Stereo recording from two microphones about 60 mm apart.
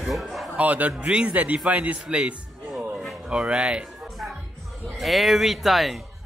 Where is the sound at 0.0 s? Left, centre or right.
Centre.